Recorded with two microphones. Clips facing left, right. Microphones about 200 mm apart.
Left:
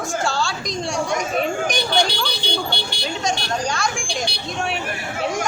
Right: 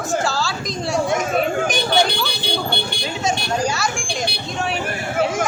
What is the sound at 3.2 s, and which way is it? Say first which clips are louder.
Speech: right 3 dB; 5° right (ahead or behind).